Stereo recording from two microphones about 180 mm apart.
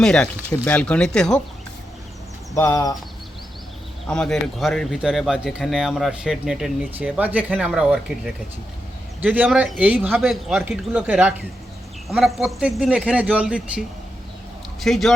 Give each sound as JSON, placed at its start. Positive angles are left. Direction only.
{"t": 0.0, "sound": "speech", "side_deg": 5}
{"t": 2.6, "sound": "speech", "side_deg": 15}
{"t": 4.0, "sound": "a man's voice", "side_deg": 5}